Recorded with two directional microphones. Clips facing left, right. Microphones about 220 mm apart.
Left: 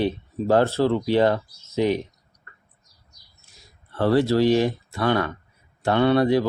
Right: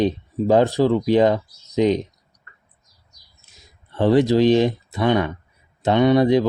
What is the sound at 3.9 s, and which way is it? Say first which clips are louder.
Speech: right 3 dB; 20° right (ahead or behind).